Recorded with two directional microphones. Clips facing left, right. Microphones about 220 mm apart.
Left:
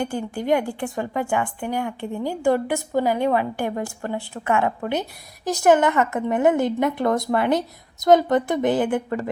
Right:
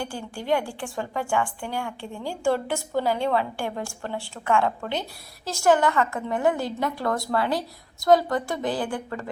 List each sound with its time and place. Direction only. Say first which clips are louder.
0.3 s a woman's voice: left 3 dB; 20° left (ahead or behind)